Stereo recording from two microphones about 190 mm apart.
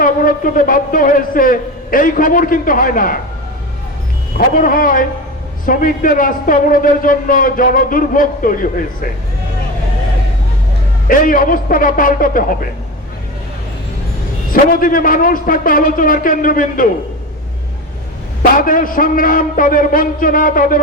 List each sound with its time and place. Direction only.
0.0 s a man's voice: 50° left (ahead or behind)
4.4 s a man's voice: 45° left (ahead or behind)
11.1 s a man's voice: 45° left (ahead or behind)
14.5 s a man's voice: 45° left (ahead or behind)
18.5 s a man's voice: 45° left (ahead or behind)